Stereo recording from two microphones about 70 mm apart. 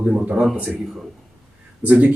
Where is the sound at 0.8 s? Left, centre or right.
Centre.